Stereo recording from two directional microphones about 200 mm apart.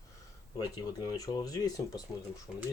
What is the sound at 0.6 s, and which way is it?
Speech, 15° left (ahead or behind).